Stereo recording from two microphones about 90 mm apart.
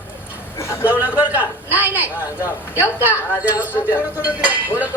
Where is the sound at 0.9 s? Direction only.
15° right (ahead or behind).